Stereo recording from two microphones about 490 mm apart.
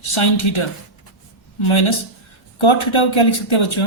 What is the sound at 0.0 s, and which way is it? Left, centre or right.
Speech, left.